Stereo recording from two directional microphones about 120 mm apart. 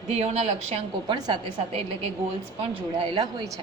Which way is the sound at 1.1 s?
40° right (ahead or behind).